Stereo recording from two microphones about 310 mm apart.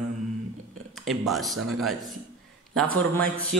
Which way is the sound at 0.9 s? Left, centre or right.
Centre.